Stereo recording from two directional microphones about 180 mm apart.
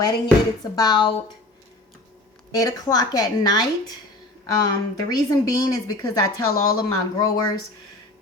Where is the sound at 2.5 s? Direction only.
20° left (ahead or behind).